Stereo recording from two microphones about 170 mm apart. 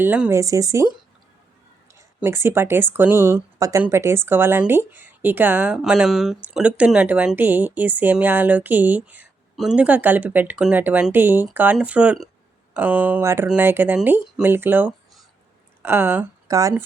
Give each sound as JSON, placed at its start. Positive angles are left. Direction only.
{"t": 0.0, "sound": "speech", "side_deg": -10}
{"t": 2.0, "sound": "speech", "side_deg": -15}